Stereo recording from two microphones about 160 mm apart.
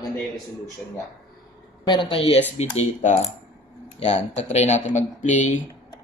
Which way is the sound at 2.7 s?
45° left (ahead or behind).